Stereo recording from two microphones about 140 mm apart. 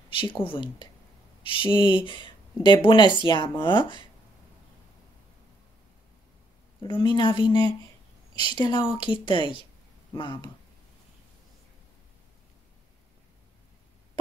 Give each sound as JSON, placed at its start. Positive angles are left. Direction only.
{"t": 0.1, "sound": "speech", "side_deg": 40}
{"t": 6.8, "sound": "speech", "side_deg": 35}
{"t": 8.4, "sound": "a woman's voice", "side_deg": -40}
{"t": 9.0, "sound": "speech", "side_deg": 35}